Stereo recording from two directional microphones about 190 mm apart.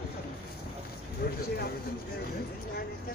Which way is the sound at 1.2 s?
55° left (ahead or behind).